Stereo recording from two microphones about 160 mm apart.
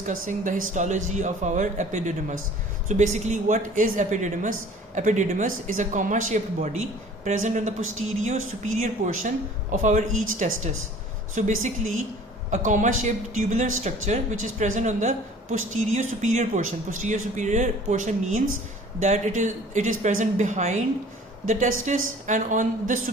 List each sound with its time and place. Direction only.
0.0 s speech: 50° right (ahead or behind)